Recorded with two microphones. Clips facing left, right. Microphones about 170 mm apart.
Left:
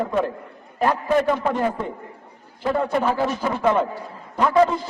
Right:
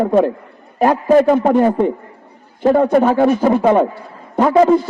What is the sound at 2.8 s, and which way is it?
Speech, 50° right (ahead or behind).